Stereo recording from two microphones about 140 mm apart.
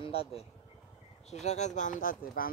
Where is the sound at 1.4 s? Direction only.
55° left (ahead or behind); by 2.4 s 70° left (ahead or behind).